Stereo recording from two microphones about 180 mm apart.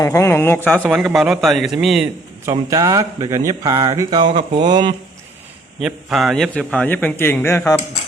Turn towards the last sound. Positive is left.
turn(degrees=15)  # may be behind; listen again after turning